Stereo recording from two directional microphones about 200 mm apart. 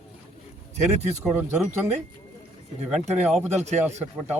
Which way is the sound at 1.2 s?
10° right (ahead or behind).